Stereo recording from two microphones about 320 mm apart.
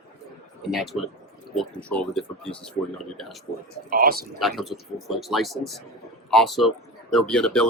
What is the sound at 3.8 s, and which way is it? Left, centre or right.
Speech, right.